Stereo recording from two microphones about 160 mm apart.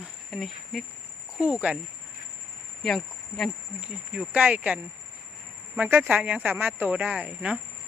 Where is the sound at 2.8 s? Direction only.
Centre (ahead or behind).